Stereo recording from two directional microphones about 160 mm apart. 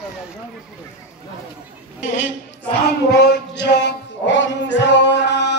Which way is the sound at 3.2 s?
90° left.